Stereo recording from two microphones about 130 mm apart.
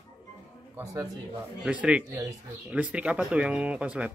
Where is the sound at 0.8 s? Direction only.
25° right (ahead or behind).